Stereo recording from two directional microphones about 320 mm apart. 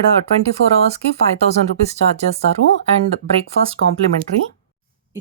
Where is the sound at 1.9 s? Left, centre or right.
Centre.